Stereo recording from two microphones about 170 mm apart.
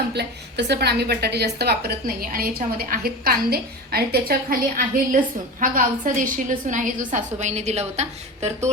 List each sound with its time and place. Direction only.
0.1 s a woman's voice: 80° right; by 8.7 s 40° right (ahead or behind)